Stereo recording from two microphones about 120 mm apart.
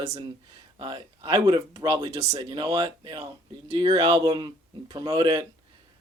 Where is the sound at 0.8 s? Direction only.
35° right (ahead or behind).